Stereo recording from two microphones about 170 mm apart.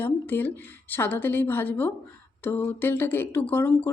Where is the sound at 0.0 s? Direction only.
15° left (ahead or behind).